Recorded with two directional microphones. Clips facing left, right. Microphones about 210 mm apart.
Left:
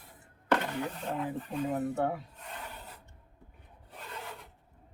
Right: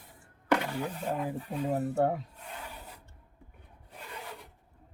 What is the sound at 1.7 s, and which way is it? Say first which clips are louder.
Speech: right 4 dB; 40° right (ahead or behind).